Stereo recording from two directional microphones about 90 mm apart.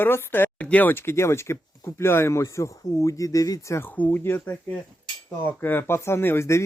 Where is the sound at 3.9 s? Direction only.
20° left (ahead or behind).